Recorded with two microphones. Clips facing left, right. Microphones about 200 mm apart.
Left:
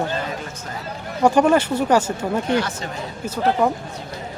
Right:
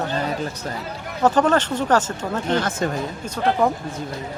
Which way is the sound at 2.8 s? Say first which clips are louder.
Right 8 dB; 50° right (ahead or behind).